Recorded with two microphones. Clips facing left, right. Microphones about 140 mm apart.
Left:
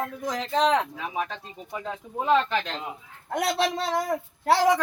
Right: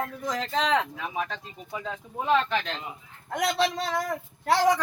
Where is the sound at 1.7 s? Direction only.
15° left (ahead or behind).